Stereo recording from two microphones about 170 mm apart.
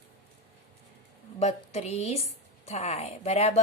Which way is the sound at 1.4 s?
40° left (ahead or behind).